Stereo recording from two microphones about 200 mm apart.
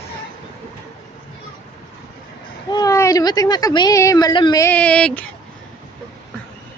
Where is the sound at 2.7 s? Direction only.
15° left (ahead or behind).